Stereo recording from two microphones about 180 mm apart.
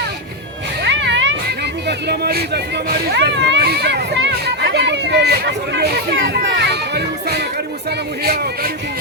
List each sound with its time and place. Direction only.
0.9 s music: 80° right
1.9 s speech: 65° right (ahead or behind)
3.2 s a sound: 70° right (ahead or behind)
7.9 s speech: 60° right (ahead or behind)